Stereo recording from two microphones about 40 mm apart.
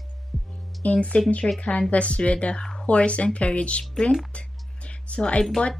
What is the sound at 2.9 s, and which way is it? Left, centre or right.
Music, left.